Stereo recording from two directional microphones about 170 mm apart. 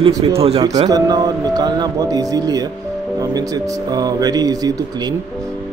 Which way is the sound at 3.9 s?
20° right (ahead or behind).